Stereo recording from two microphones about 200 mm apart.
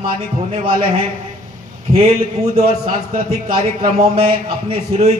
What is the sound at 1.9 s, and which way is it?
Speech, 30° right (ahead or behind).